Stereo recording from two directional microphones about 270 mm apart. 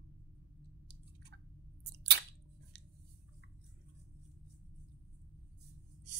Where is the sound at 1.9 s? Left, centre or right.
Right.